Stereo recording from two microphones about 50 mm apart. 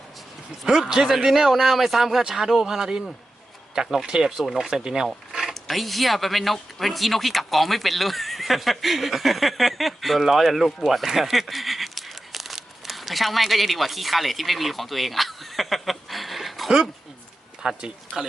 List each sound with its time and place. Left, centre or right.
0.6 s a man's voice: centre
5.3 s a sound: centre
5.5 s speech: centre
17.6 s a man's voice: centre